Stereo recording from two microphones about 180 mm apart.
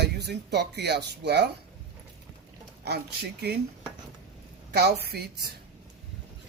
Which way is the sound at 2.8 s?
65° right (ahead or behind).